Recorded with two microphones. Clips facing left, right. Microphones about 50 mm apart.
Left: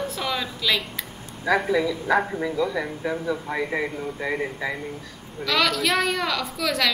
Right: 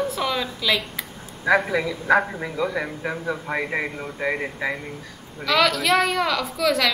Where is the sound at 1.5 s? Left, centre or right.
Centre.